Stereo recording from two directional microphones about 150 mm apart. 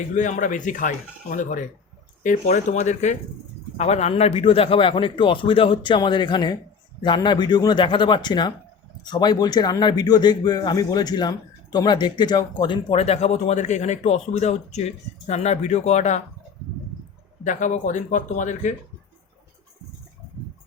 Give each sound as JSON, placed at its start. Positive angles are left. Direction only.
{"t": 0.2, "sound": "speech", "side_deg": 60}
{"t": 17.4, "sound": "speech", "side_deg": 55}